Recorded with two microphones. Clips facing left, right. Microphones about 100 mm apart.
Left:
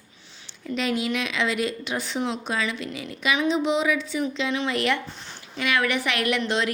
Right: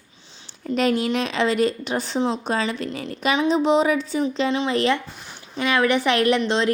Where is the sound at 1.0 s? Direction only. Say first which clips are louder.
Right 4 dB; 35° right (ahead or behind).